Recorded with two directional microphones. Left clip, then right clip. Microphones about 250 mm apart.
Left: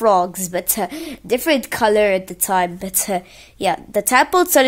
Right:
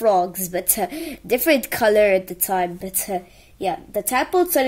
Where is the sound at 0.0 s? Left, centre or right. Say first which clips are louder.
Left 3 dB; centre.